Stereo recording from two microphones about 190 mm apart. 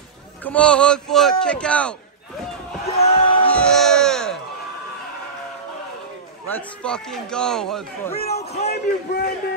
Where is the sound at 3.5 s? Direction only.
5° left (ahead or behind).